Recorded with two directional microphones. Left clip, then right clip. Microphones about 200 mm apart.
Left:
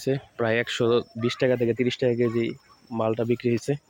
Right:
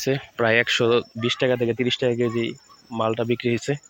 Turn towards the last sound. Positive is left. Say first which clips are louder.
# right 1 dB
turn(degrees=0)  # may be behind; listen again after turning